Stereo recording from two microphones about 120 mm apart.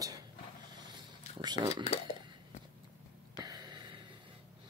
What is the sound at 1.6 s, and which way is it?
Speech, 65° left (ahead or behind).